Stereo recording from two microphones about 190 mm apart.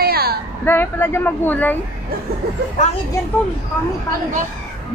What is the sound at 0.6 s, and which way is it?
Speech, 10° left (ahead or behind).